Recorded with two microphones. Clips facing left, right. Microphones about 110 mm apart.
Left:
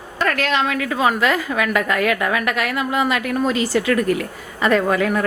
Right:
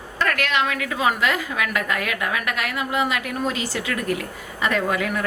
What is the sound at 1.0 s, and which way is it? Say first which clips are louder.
A woman's voice: left 3 dB; 45° left (ahead or behind).